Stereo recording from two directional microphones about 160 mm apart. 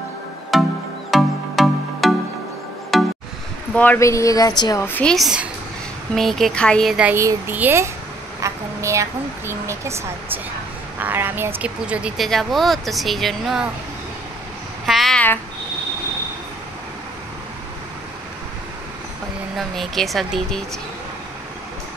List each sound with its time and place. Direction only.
0.5 s music: centre (ahead or behind)
3.7 s speech: 10° left (ahead or behind)
4.8 s speech: 10° left (ahead or behind)
7.2 s speech: 15° right (ahead or behind)
8.4 s a sound: 20° right (ahead or behind)
9.5 s speech: 15° right (ahead or behind); by 13.7 s centre (ahead or behind)
14.9 s a sound: centre (ahead or behind)
19.5 s speech: centre (ahead or behind)